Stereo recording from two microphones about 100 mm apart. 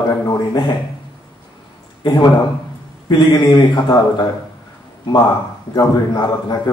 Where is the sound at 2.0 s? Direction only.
50° left (ahead or behind).